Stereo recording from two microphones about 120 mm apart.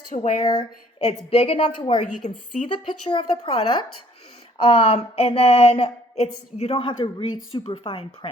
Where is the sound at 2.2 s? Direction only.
75° left (ahead or behind).